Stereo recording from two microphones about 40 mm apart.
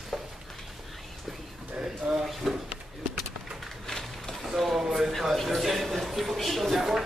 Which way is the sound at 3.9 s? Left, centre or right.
Centre.